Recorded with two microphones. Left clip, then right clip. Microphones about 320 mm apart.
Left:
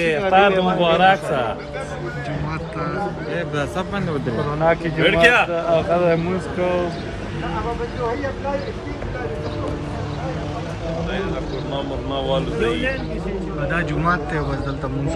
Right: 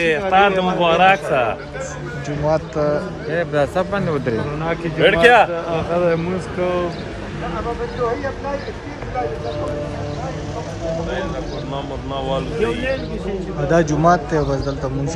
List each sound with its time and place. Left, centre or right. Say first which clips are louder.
0.0 s a man's voice: right 1 dB; centre
3.3 s speech: right 8 dB; right
5.0 s speech: right 3 dB; right
5.5 s speech: left 3 dB; centre
12.6 s speech: right 3 dB; right
13.7 s a man's voice: right 7 dB; centre